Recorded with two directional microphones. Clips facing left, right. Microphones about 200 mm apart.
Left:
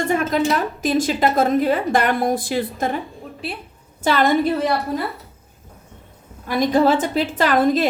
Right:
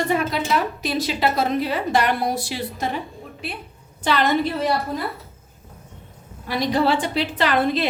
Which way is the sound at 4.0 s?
45° left (ahead or behind).